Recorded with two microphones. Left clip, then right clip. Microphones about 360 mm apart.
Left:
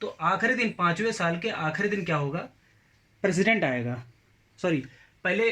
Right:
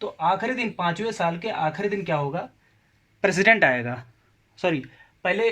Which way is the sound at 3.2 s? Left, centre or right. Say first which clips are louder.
Right 6 dB; right.